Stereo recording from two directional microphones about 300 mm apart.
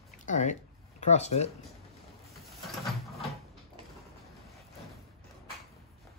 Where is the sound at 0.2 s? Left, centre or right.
Left.